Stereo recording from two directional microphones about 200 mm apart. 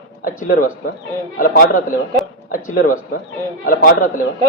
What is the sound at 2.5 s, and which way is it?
Speech, 45° left (ahead or behind).